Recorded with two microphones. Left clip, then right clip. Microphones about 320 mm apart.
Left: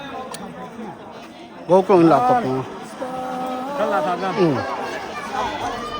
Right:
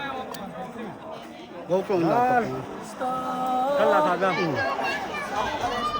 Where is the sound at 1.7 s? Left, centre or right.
Centre.